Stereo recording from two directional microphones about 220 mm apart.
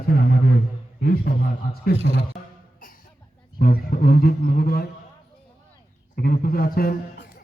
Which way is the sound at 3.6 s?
45° left (ahead or behind).